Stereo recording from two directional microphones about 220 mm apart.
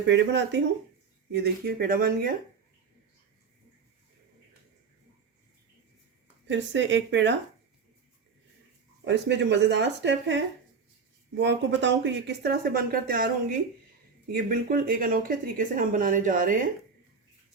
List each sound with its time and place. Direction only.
0.1 s speech: 50° right (ahead or behind)
6.5 s speech: 55° right (ahead or behind)
9.0 s speech: 55° right (ahead or behind)